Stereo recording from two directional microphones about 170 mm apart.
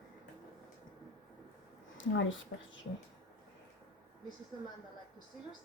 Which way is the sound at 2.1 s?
90° left.